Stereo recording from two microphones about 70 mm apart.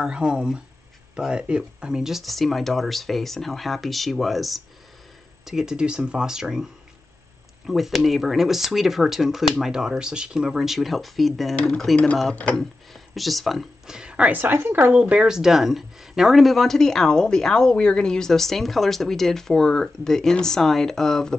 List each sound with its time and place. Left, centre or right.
0.0 s speech: centre
11.5 s speech: centre
12.5 s speech: centre
14.3 s a woman's voice: right
15.0 s speech: centre